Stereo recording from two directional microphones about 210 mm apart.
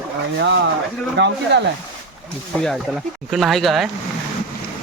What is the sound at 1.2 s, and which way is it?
Speech, 55° right (ahead or behind).